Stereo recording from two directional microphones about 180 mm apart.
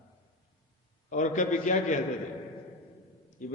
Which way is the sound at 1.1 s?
45° left (ahead or behind).